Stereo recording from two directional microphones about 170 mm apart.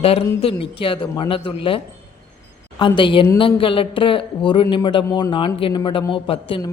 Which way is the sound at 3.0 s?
30° left (ahead or behind).